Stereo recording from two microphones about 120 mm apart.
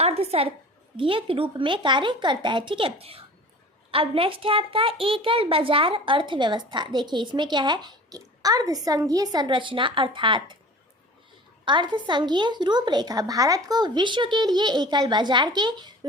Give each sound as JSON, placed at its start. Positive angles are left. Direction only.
{"t": 0.0, "sound": "a woman's voice", "side_deg": -60}
{"t": 11.6, "sound": "a woman's voice", "side_deg": -40}